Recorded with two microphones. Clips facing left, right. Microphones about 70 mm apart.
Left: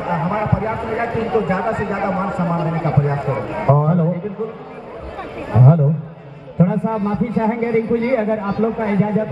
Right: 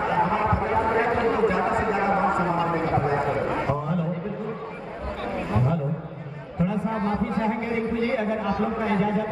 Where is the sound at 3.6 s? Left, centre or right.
Left.